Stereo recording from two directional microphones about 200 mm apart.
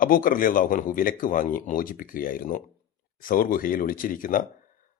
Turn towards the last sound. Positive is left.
turn(degrees=45)  # may be behind; listen again after turning